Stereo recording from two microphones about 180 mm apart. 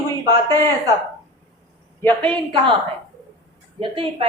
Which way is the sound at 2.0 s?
10° left (ahead or behind).